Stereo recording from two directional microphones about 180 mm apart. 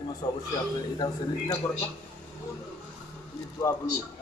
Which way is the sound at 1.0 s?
20° left (ahead or behind).